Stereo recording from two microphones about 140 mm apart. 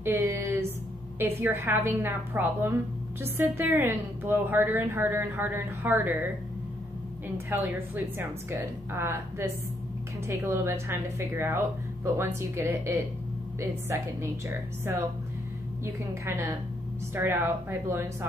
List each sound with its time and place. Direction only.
0.0 s a sound: 15° right (ahead or behind)
1.2 s a woman's voice: 20° right (ahead or behind)
7.3 s a woman's voice: 20° right (ahead or behind)